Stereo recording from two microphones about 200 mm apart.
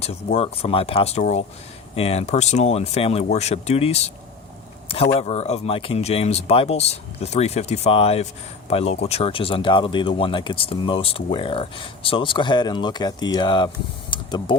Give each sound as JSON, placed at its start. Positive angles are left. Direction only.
{"t": 0.0, "sound": "speech", "side_deg": 30}
{"t": 14.1, "sound": "mechanisms", "side_deg": 20}